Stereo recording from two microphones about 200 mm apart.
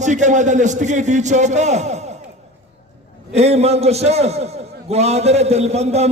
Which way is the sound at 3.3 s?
30° right (ahead or behind).